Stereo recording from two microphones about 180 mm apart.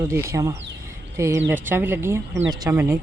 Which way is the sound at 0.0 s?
15° right (ahead or behind).